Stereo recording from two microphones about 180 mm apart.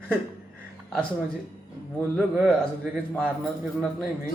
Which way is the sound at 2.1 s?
Centre (ahead or behind).